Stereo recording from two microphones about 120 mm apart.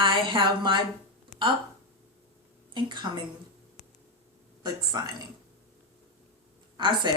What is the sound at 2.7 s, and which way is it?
Speech, 40° right (ahead or behind).